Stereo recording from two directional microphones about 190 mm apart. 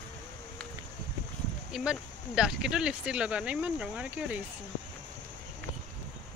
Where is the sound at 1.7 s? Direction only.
5° right (ahead or behind).